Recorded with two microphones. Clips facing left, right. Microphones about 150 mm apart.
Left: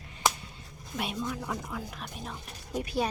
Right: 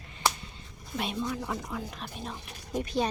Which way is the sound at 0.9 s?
10° left (ahead or behind).